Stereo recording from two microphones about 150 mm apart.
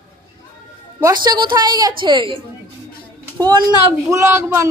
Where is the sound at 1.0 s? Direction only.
25° right (ahead or behind).